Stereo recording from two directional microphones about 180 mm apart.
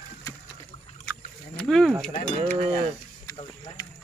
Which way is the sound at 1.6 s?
5° left (ahead or behind).